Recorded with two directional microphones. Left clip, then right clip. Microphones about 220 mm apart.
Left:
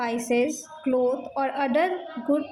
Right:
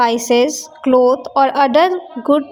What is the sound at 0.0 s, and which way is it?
A woman's voice, 45° right (ahead or behind).